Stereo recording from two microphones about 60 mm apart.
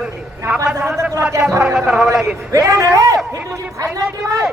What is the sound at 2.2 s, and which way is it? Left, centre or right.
Speech, right.